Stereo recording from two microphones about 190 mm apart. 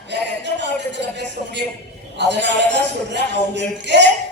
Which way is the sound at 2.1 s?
65° right (ahead or behind).